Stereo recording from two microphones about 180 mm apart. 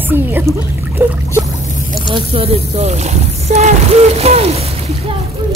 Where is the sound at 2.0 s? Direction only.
30° right (ahead or behind).